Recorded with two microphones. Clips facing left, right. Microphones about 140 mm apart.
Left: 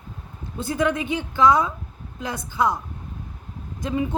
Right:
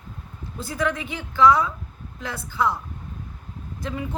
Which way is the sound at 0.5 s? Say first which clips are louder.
Left 3 dB; 20° left (ahead or behind).